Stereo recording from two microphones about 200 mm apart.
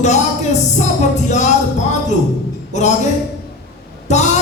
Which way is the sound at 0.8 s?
35° left (ahead or behind).